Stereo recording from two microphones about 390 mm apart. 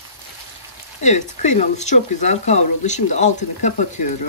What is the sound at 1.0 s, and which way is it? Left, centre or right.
Speech, centre.